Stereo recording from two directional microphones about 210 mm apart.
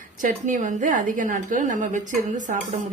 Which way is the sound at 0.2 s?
35° right (ahead or behind).